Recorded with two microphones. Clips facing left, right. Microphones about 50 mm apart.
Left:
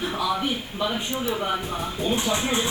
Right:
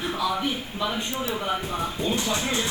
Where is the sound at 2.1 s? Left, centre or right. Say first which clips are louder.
Left 2 dB; left.